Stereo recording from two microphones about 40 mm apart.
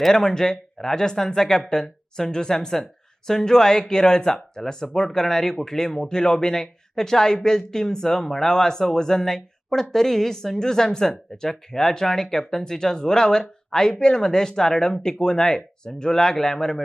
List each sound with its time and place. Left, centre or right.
0.1 s speech: centre